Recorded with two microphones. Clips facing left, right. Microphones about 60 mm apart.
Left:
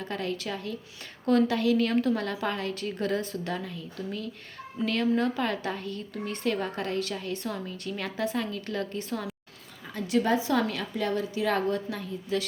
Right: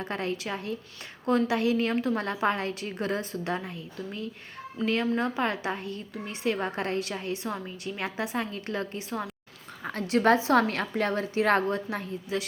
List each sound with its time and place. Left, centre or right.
0.0 s a woman's voice: right
8.4 s a woman's voice: right
9.0 s a woman's voice: centre
10.5 s a woman's voice: right